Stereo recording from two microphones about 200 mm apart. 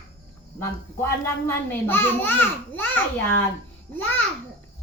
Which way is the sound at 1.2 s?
10° left (ahead or behind).